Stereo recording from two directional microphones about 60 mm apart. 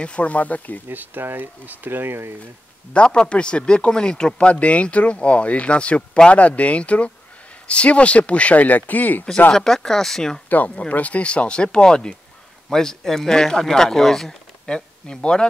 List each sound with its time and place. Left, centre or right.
0.0 s a man's voice: left
0.8 s speech: right
2.9 s a man's voice: centre
9.5 s a man's voice: centre
10.9 s a man's voice: left